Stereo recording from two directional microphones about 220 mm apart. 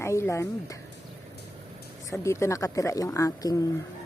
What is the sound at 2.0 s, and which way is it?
Speech, 15° left (ahead or behind).